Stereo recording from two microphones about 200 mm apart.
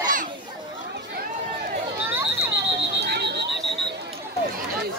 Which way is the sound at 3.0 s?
55° right (ahead or behind).